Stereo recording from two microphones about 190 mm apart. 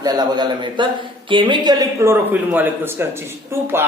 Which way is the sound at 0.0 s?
20° right (ahead or behind).